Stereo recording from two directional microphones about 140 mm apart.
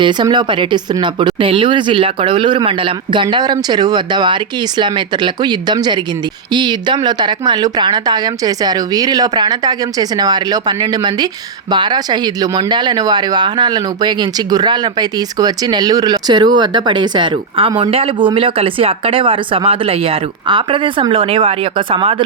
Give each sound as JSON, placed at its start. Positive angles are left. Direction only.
{"t": 0.0, "sound": "speech", "side_deg": -30}